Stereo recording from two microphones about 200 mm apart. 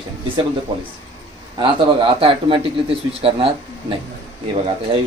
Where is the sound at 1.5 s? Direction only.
25° right (ahead or behind).